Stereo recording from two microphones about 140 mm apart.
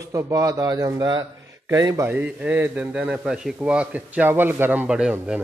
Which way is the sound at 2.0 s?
10° right (ahead or behind).